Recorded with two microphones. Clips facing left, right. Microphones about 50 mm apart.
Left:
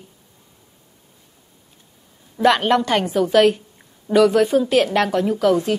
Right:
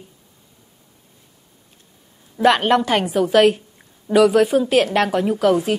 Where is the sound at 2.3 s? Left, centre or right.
Centre.